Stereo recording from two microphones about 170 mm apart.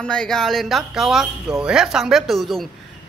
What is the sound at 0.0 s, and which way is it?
Speech, 5° left (ahead or behind).